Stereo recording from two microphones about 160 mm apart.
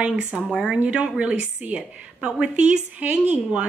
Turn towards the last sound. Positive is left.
turn(degrees=-10)  # may be behind; listen again after turning